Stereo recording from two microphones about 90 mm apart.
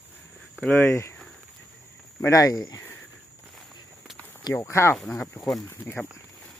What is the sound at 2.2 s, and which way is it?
Speech, 40° left (ahead or behind).